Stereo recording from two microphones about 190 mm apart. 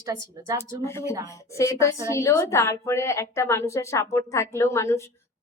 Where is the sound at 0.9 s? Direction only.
15° left (ahead or behind).